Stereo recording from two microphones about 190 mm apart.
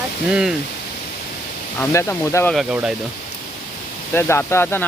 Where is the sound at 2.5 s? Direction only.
5° right (ahead or behind).